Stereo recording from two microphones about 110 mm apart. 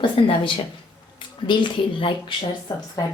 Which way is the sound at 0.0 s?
55° left (ahead or behind).